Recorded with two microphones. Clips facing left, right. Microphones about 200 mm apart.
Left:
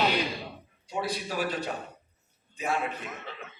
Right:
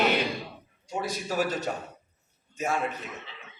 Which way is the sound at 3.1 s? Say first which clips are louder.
Left 2 dB; 50° left (ahead or behind).